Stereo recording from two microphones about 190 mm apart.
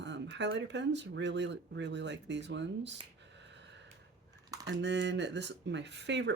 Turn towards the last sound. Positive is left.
turn(degrees=-70)  # may be behind; listen again after turning